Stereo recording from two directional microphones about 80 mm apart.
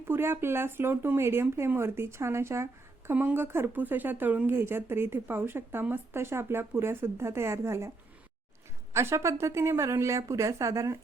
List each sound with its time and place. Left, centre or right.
0.1 s speech: right
3.1 s speech: right
8.9 s speech: right